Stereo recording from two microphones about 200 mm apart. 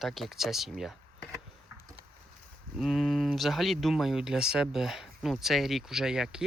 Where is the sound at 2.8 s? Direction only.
Centre (ahead or behind).